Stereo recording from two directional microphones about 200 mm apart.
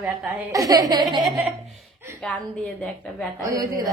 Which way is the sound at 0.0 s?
10° right (ahead or behind).